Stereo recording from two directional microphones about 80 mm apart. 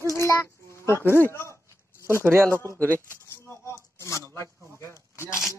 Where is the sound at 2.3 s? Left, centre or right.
Right.